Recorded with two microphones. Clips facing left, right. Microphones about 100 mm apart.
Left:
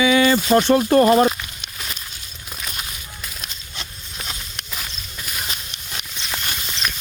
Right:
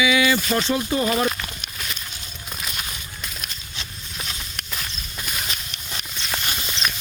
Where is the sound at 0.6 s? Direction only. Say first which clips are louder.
Left 8 dB; 55° left (ahead or behind).